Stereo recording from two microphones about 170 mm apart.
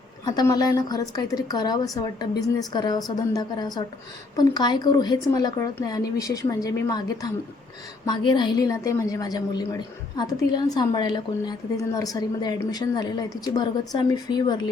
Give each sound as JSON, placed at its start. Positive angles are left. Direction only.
{"t": 0.3, "sound": "a woman's voice", "side_deg": 25}